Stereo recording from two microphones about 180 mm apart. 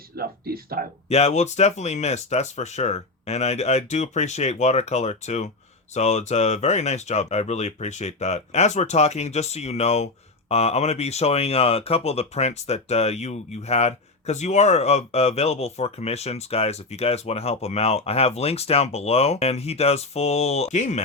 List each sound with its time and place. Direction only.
0.2 s speech: 55° right (ahead or behind)
1.0 s speech: 35° left (ahead or behind)